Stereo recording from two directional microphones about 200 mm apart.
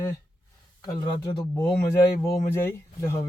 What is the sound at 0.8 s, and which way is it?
Speech, 15° left (ahead or behind).